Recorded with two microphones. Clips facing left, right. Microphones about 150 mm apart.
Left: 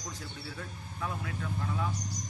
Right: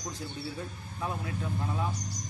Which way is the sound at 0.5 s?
25° right (ahead or behind).